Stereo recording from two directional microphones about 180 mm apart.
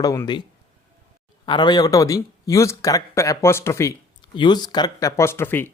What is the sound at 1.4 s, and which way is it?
Speech, 25° left (ahead or behind).